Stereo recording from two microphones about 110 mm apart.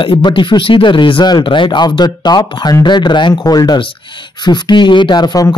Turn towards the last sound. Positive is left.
turn(degrees=40)  # may be behind; listen again after turning